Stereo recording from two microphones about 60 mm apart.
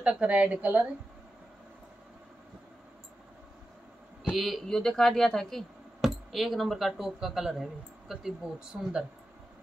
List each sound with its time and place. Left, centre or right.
0.0 s a woman's voice: centre
4.4 s speech: centre
4.6 s speech: centre